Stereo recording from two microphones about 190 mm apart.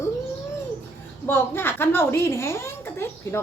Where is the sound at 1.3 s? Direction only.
10° left (ahead or behind).